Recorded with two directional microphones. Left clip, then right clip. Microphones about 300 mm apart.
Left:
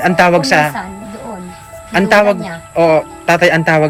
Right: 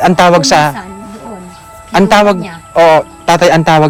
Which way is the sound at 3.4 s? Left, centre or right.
Right.